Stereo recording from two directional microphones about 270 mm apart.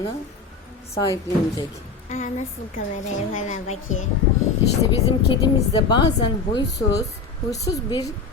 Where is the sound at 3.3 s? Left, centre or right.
Left.